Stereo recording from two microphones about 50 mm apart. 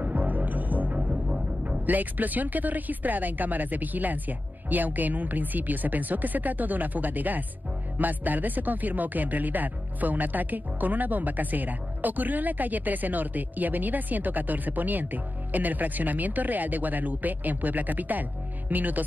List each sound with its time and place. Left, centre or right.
0.0 s music: right
1.1 s music: right
1.9 s speech: right